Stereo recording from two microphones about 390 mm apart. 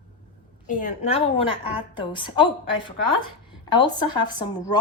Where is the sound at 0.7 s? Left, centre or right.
Centre.